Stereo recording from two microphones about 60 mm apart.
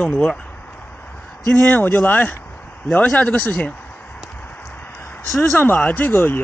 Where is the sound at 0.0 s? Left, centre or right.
Left.